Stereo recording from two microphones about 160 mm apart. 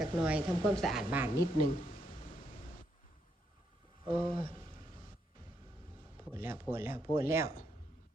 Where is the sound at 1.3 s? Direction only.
60° left (ahead or behind).